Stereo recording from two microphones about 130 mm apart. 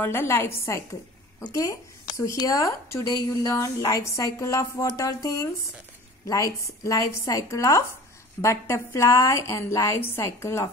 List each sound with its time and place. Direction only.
0.0 s speech: 15° left (ahead or behind)